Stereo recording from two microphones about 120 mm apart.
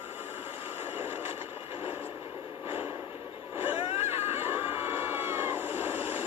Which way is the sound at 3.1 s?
15° right (ahead or behind).